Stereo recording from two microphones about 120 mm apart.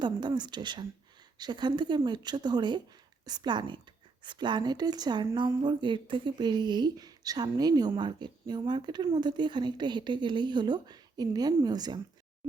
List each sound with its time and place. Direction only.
0.0 s speech: 40° right (ahead or behind)